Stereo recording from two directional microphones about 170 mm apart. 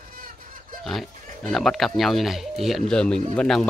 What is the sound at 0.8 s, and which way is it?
Speech, centre (ahead or behind).